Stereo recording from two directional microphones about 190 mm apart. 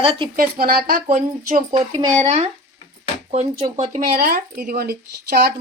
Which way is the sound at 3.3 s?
35° right (ahead or behind).